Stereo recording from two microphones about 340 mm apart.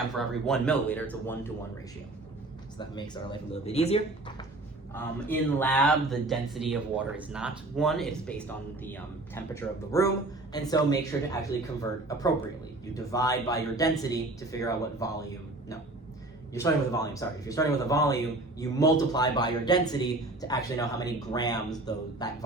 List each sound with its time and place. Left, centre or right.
0.2 s speech: centre
3.5 s speech: centre
5.3 s speech: centre
16.6 s speech: centre